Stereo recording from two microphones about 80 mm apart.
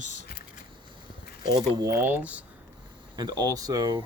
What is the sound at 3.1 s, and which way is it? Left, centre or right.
Speech, right.